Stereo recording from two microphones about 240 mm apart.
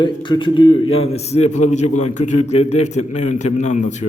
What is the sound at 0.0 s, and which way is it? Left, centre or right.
Speech, centre.